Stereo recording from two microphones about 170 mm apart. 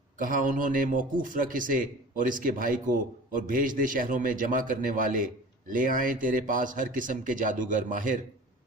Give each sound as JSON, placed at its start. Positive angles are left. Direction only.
{"t": 0.2, "sound": "a man's voice", "side_deg": -50}